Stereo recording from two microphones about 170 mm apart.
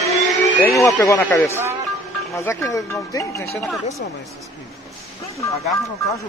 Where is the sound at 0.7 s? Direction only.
20° left (ahead or behind).